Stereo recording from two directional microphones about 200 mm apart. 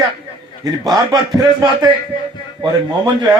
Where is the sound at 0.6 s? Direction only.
20° right (ahead or behind).